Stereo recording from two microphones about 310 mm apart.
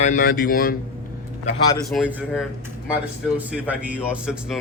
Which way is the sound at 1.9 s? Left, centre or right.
Centre.